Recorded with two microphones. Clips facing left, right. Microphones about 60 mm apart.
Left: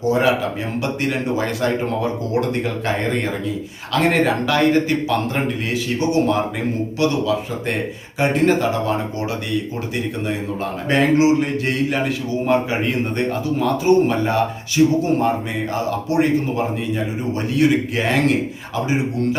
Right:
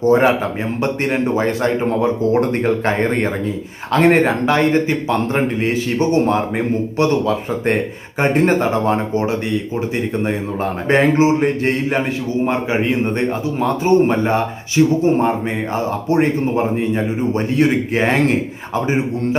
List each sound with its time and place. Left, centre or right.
0.0 s speech: right
10.8 s speech: right
13.1 s speech: right